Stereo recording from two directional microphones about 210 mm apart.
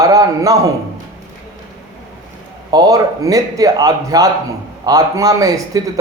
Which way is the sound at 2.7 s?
15° right (ahead or behind).